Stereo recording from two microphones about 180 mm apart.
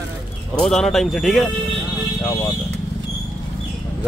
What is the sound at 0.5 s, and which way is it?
Speech, centre (ahead or behind).